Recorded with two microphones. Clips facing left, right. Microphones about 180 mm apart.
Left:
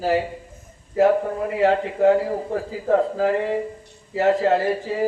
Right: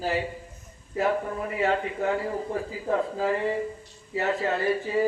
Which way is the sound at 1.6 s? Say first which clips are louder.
Left 8 dB; 45° left (ahead or behind).